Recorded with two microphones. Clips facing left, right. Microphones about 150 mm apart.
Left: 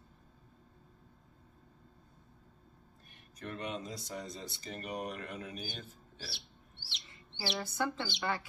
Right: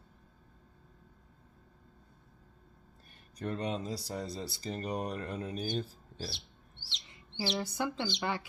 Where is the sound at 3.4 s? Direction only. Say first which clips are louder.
Right 5 dB; 35° right (ahead or behind).